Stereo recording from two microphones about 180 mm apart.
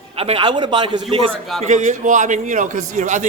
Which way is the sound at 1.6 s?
45° right (ahead or behind).